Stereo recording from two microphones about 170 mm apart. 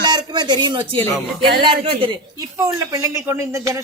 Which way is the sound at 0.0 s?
25° right (ahead or behind).